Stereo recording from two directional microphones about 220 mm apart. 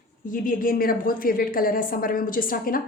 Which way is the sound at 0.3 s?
40° left (ahead or behind).